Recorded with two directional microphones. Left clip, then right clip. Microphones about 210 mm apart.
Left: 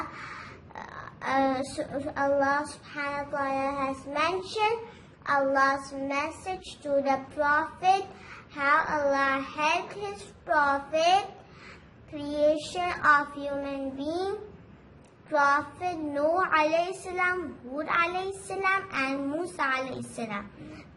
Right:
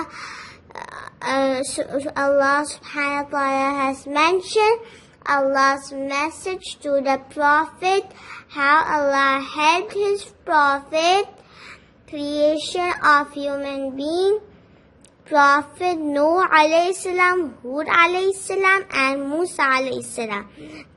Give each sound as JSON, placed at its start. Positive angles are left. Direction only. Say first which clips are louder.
{"t": 0.7, "sound": "a woman's voice", "louder": "right 8 dB", "side_deg": -40}
{"t": 5.2, "sound": "child singing", "louder": "right 7 dB", "side_deg": -55}